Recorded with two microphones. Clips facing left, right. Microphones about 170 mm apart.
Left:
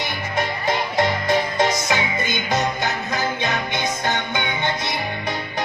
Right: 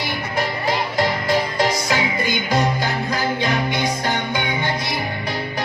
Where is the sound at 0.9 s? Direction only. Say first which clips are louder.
Left 1 dB; 20° left (ahead or behind).